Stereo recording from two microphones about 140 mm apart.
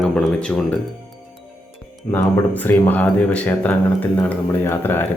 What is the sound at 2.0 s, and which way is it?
Speech, 20° left (ahead or behind).